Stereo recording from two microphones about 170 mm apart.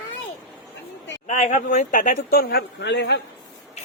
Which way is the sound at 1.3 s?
45° left (ahead or behind).